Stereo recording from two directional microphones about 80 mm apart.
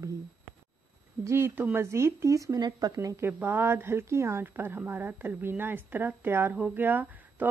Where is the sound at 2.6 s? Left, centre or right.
Right.